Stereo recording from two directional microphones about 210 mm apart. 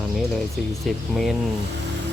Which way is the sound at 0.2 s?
Centre (ahead or behind).